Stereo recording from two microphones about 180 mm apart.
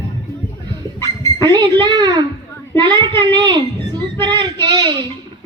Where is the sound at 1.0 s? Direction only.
20° right (ahead or behind).